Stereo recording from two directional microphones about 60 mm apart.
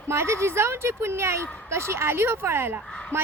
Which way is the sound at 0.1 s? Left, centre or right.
Right.